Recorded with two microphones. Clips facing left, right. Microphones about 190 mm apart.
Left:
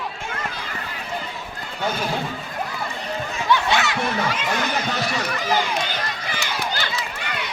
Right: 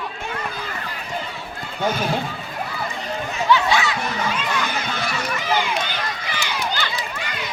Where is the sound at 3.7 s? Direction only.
70° left (ahead or behind).